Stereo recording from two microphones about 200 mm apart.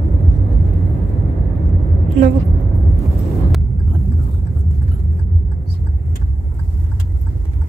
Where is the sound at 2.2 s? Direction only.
35° right (ahead or behind).